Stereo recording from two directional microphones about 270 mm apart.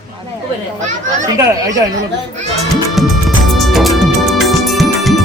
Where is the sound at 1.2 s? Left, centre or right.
Centre.